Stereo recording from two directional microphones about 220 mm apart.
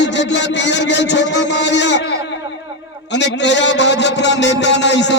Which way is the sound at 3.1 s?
55° left (ahead or behind).